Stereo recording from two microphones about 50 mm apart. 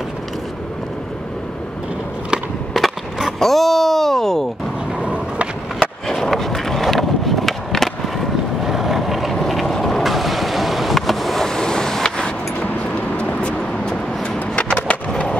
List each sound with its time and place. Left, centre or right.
2.7 s skateboard: centre
5.0 s skateboard: right
6.2 s skateboard: centre
8.6 s vehicle: centre
13.2 s vehicle: left
13.8 s skateboard: centre